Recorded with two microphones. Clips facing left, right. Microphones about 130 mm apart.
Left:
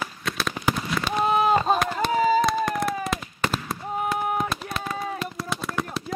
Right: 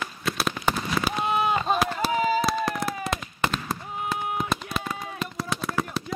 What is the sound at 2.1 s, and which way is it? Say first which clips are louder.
Fireworks: left 5 dB; 40° left (ahead or behind).